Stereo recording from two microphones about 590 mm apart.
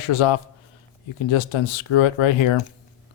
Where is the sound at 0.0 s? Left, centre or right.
Left.